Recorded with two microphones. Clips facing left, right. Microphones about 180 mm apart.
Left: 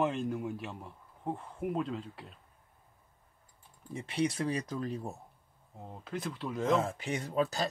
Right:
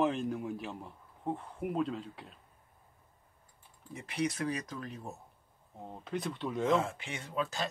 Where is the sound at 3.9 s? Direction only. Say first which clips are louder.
Left 2 dB; 30° left (ahead or behind).